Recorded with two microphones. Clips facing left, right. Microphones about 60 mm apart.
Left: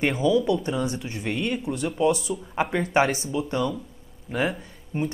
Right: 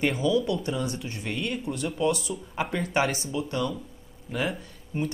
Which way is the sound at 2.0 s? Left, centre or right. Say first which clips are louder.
Left 4 dB; left.